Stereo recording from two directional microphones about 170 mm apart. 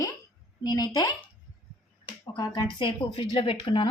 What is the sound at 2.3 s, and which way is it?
A woman's voice, 25° left (ahead or behind).